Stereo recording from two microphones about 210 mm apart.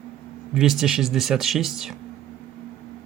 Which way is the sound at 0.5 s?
Centre (ahead or behind).